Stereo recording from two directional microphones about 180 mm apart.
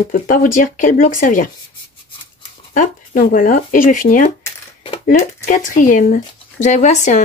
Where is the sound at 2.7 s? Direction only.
50° left (ahead or behind).